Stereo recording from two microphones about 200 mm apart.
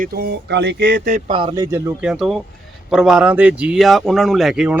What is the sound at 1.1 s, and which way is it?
Speech, 25° right (ahead or behind).